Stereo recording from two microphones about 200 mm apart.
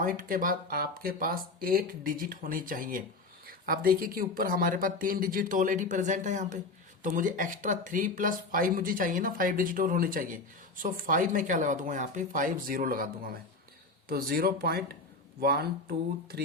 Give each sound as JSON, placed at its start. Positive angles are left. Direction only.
{"t": 0.0, "sound": "speech", "side_deg": -45}